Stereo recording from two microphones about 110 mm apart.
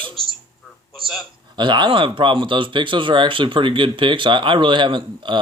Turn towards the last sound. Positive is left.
turn(degrees=-45)  # may be behind; listen again after turning